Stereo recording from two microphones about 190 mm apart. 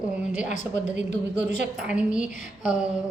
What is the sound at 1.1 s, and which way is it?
Speech, 60° right (ahead or behind).